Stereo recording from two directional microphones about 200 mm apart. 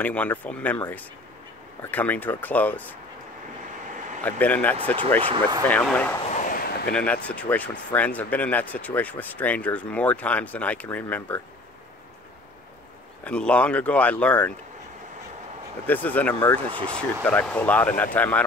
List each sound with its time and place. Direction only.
0.0 s speech: 10° left (ahead or behind)
4.2 s speech: 10° left (ahead or behind)
5.2 s speech: 25° right (ahead or behind)
5.7 s speech: 5° left (ahead or behind)
6.2 s a sound: 40° left (ahead or behind)
6.9 s speech: 5° left (ahead or behind)
13.2 s speech: 5° left (ahead or behind)
15.9 s speech: 10° left (ahead or behind)